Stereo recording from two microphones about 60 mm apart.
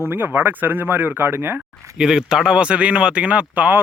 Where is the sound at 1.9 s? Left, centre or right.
Centre.